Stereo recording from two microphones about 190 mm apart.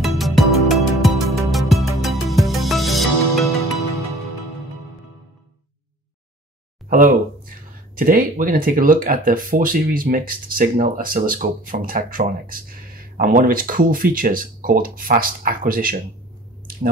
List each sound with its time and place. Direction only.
0.0 s music: centre (ahead or behind)
6.9 s speech: 45° right (ahead or behind)